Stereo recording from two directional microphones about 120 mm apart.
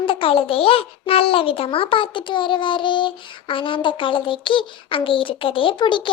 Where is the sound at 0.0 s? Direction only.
50° left (ahead or behind).